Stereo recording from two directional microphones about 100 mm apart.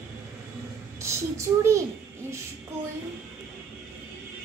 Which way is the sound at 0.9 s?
30° right (ahead or behind).